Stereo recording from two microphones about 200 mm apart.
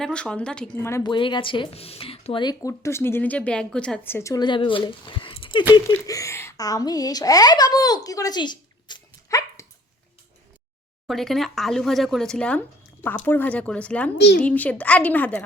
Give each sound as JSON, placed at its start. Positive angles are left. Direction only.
{"t": 0.0, "sound": "a woman's voice", "side_deg": 5}
{"t": 11.0, "sound": "speech", "side_deg": 0}
{"t": 14.2, "sound": "a woman's voice", "side_deg": 55}
{"t": 14.4, "sound": "a woman's voice", "side_deg": 5}